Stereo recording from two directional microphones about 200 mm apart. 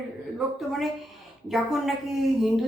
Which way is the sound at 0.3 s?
Centre (ahead or behind).